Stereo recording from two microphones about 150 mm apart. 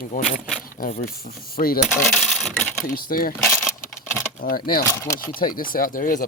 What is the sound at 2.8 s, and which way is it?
Speech, 75° left (ahead or behind).